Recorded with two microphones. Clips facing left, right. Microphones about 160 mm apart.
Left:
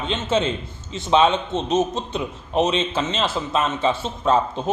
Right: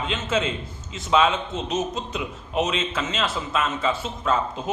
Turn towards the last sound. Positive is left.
turn(degrees=30)  # may be behind; listen again after turning